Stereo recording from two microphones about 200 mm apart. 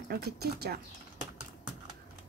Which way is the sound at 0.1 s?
50° right (ahead or behind).